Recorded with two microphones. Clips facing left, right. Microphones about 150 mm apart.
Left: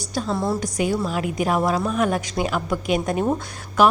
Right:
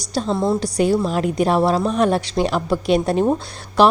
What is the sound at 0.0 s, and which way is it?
Speech, 35° right (ahead or behind).